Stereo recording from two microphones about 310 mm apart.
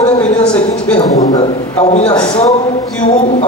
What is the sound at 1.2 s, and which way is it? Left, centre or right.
A man's voice, left.